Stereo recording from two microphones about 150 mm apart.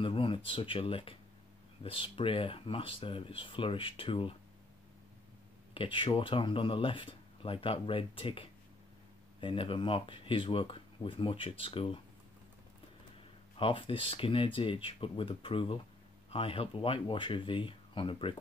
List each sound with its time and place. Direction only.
0.0 s speech: 35° left (ahead or behind)
5.8 s speech: 35° left (ahead or behind)
13.6 s speech: 35° left (ahead or behind)